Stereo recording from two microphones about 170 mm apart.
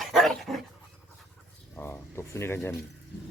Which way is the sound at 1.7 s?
15° left (ahead or behind).